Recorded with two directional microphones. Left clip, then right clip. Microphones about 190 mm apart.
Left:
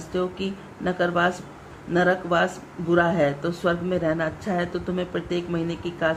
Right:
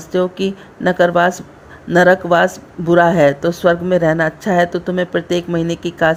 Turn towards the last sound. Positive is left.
turn(degrees=-45)  # may be behind; listen again after turning